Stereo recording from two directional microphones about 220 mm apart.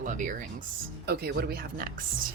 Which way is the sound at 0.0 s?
35° right (ahead or behind).